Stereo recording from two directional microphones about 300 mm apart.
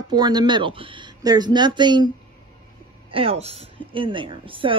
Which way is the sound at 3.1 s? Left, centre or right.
Centre.